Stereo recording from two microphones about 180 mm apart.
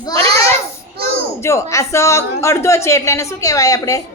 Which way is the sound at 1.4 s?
15° left (ahead or behind).